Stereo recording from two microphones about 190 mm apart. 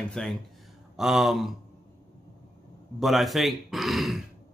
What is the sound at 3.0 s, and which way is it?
Speech, centre (ahead or behind).